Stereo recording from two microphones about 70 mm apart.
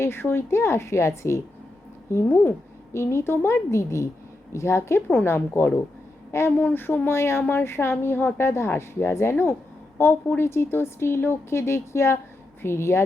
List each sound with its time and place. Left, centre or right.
0.0 s a woman's voice: left